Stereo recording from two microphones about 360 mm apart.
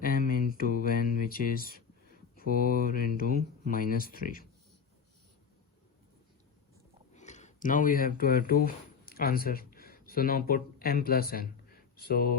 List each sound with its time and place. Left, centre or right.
0.0 s mantra: left
2.3 s speech: left
7.1 s speech: centre